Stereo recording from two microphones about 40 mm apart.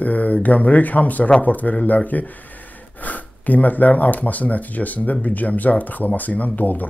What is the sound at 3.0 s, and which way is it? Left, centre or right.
Speech, left.